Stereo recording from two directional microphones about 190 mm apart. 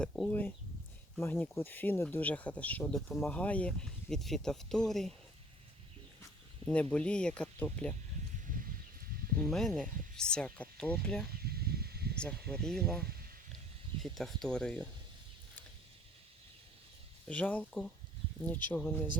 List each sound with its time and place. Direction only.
0.0 s speech: 5° left (ahead or behind)
6.9 s speech: 5° left (ahead or behind)
9.4 s speech: centre (ahead or behind)
11.3 s snake: 55° right (ahead or behind)
12.5 s speech: 5° left (ahead or behind)
17.2 s speech: 5° left (ahead or behind)